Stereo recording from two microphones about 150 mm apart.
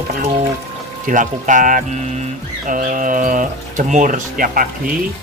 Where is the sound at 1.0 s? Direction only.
60° right (ahead or behind).